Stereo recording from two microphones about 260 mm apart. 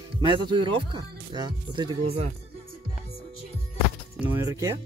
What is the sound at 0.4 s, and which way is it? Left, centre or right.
Speech, centre.